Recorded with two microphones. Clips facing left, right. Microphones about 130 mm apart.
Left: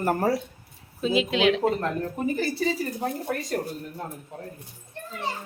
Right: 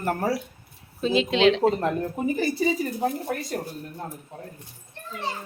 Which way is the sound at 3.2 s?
5° right (ahead or behind).